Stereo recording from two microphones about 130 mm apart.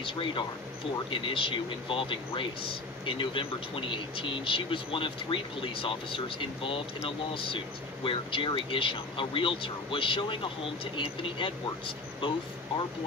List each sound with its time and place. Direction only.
0.0 s speech: 40° left (ahead or behind)